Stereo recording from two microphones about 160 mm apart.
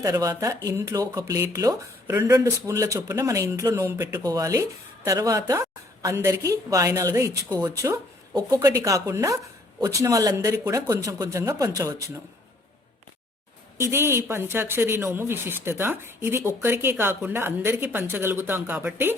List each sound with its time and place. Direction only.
0.0 s speech: 20° right (ahead or behind)
13.9 s speech: 15° right (ahead or behind)